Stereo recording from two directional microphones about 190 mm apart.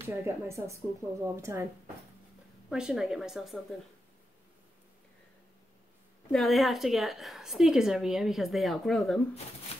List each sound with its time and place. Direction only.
0.0 s a woman's voice: 15° right (ahead or behind)
2.7 s a woman's voice: 5° right (ahead or behind)
6.3 s a woman's voice: centre (ahead or behind)
9.7 s a sound: 30° left (ahead or behind)